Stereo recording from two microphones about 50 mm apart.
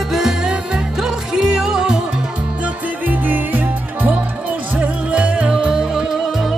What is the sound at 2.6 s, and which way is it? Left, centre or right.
Music, right.